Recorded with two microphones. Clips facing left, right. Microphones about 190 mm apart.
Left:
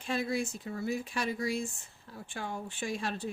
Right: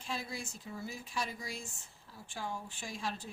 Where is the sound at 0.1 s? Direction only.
65° left (ahead or behind).